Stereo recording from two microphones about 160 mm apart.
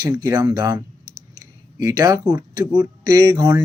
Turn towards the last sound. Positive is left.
turn(degrees=-20)  # may be behind; listen again after turning